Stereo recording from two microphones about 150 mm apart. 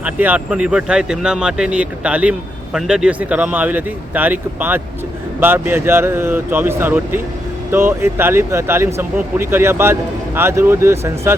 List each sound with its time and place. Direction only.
0.0 s speech: 10° right (ahead or behind)